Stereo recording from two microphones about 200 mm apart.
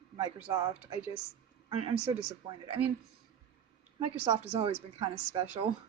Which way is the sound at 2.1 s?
20° right (ahead or behind).